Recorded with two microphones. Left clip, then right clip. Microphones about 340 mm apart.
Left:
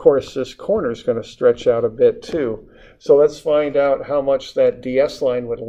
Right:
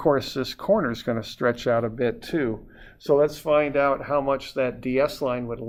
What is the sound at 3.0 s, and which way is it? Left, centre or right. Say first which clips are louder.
Speech: left 7 dB; right.